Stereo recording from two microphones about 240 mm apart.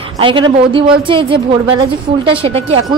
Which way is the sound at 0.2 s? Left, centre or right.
Right.